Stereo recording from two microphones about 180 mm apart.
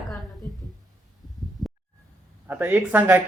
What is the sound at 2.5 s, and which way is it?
Speech, 10° right (ahead or behind).